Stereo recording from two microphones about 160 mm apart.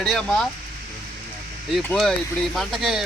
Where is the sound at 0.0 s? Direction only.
5° left (ahead or behind).